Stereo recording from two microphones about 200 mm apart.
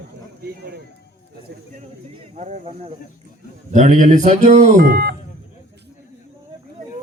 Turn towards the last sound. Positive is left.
turn(degrees=-55)  # may be behind; listen again after turning